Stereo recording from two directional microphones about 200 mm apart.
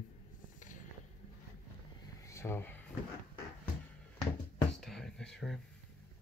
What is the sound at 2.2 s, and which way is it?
Vehicle, 15° left (ahead or behind).